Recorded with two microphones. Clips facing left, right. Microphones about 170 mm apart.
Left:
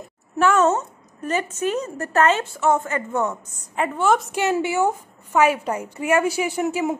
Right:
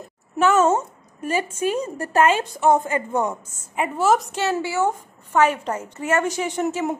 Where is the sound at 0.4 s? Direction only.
5° right (ahead or behind).